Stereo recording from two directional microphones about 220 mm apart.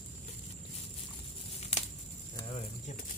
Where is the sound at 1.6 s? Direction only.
30° left (ahead or behind).